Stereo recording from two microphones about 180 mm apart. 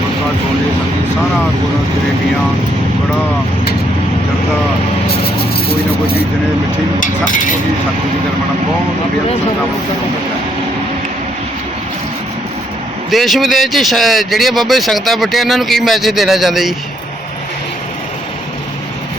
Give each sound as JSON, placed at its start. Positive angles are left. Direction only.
{"t": 5.6, "sound": "speech", "side_deg": 60}
{"t": 13.1, "sound": "speech", "side_deg": 0}